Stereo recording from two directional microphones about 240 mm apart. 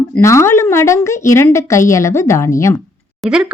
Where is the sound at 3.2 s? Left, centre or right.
Centre.